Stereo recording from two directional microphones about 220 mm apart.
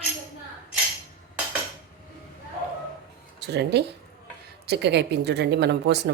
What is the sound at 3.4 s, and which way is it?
A woman's voice, 50° right (ahead or behind).